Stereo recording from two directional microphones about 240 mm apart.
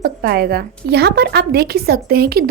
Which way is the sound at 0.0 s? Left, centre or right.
Right.